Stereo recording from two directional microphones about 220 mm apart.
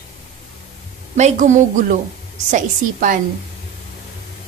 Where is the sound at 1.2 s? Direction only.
30° right (ahead or behind).